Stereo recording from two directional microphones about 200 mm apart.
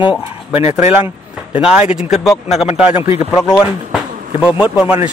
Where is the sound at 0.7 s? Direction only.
10° right (ahead or behind).